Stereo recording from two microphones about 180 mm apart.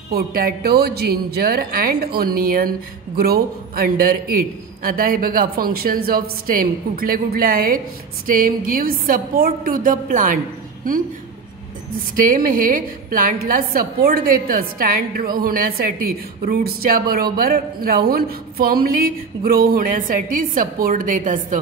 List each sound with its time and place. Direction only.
0.1 s a woman's voice: 55° right (ahead or behind)
12.2 s a woman's voice: 50° right (ahead or behind)